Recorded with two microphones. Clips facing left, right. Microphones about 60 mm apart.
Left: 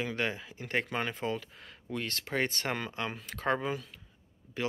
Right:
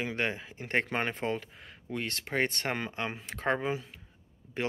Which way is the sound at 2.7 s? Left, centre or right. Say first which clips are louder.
Right 1 dB; right.